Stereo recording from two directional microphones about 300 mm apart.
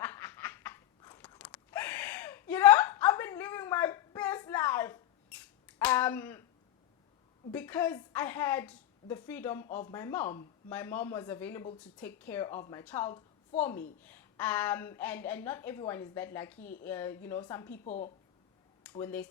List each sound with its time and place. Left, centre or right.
0.0 s a sound: centre
7.5 s a woman's voice: centre
17.8 s speech: left
18.8 s speech: centre